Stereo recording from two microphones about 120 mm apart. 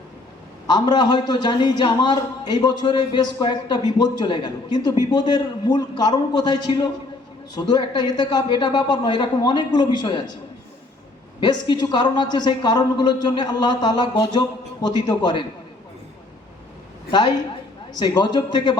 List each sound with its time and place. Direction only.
0.7 s a woman's voice: 40° left (ahead or behind)
11.3 s a woman's voice: 40° left (ahead or behind)
17.1 s a woman's voice: 40° left (ahead or behind)